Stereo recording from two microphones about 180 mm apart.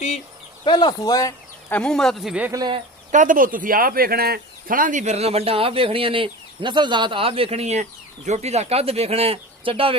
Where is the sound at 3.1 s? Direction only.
45° right (ahead or behind).